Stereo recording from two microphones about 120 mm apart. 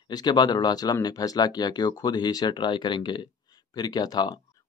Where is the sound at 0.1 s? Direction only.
35° left (ahead or behind).